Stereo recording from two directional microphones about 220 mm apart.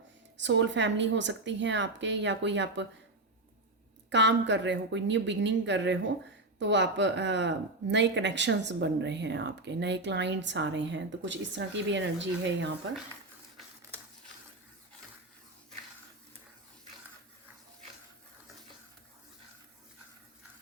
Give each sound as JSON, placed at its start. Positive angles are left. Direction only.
{"t": 0.3, "sound": "a woman's voice", "side_deg": -55}
{"t": 4.1, "sound": "speech", "side_deg": -55}